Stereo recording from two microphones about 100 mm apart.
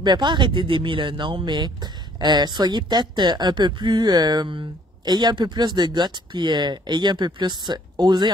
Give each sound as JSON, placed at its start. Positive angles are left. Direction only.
{"t": 0.0, "sound": "speech", "side_deg": -50}